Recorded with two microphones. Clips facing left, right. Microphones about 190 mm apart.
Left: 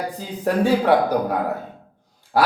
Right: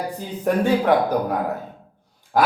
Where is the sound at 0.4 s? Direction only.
10° left (ahead or behind).